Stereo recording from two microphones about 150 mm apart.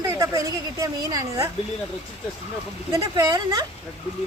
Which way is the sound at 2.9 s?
25° right (ahead or behind).